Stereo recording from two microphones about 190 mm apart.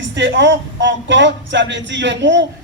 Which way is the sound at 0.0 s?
70° right (ahead or behind).